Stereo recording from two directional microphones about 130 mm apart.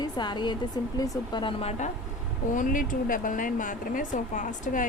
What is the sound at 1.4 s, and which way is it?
Speech, 45° left (ahead or behind).